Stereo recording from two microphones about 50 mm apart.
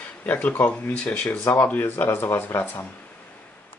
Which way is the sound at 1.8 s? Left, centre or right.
Left.